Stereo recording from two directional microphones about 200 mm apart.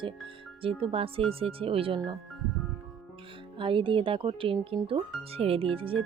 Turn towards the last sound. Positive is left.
turn(degrees=-25)  # may be behind; listen again after turning